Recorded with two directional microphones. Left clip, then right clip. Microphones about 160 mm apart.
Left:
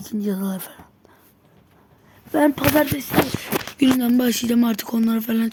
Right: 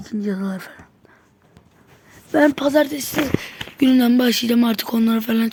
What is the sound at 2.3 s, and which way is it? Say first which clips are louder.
Speech: right 2 dB; 20° right (ahead or behind).